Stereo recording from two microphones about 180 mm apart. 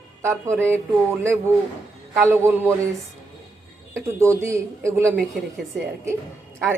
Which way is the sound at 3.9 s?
15° right (ahead or behind).